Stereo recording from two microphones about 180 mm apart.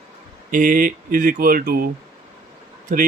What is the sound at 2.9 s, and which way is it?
Speech, 55° right (ahead or behind).